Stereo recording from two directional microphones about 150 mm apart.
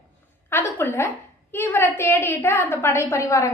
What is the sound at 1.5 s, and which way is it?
A woman's voice, 15° left (ahead or behind).